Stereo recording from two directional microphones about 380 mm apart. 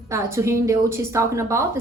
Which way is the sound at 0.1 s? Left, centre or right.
Centre.